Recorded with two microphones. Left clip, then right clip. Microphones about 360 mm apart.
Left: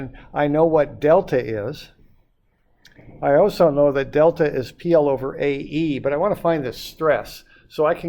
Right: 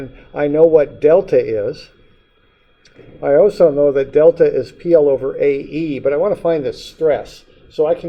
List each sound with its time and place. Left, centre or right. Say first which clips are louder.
0.7 s a man's voice: right 5 dB; left
3.2 s a man's voice: right 4 dB; left